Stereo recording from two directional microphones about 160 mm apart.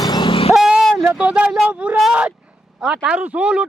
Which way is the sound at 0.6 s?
5° right (ahead or behind).